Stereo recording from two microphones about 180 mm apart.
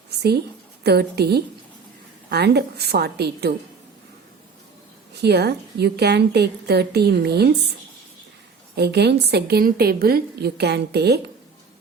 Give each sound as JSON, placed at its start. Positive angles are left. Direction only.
{"t": 0.9, "sound": "a woman's voice", "side_deg": -65}
{"t": 5.2, "sound": "a woman's voice", "side_deg": -65}
{"t": 8.7, "sound": "a woman's voice", "side_deg": -65}